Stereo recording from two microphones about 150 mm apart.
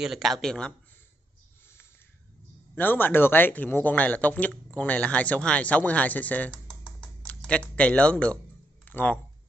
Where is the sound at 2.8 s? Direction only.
15° left (ahead or behind).